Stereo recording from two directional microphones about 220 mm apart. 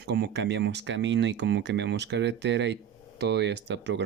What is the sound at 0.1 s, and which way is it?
Speech, 50° right (ahead or behind).